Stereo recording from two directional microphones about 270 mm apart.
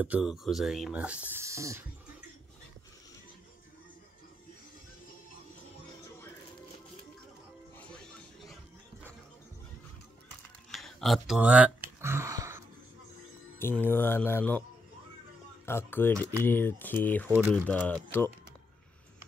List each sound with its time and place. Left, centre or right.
0.0 s speech: centre
7.7 s music: centre
10.7 s a sound: centre
13.6 s speech: centre
15.6 s speech: centre
17.3 s speech: centre
17.6 s speech: centre